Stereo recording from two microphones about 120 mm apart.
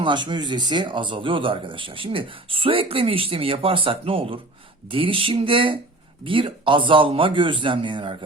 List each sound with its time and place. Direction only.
0.0 s speech: 40° right (ahead or behind)